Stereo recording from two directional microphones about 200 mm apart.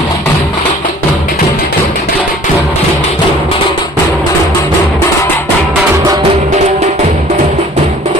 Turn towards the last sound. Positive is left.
turn(degrees=-30)  # may be behind; listen again after turning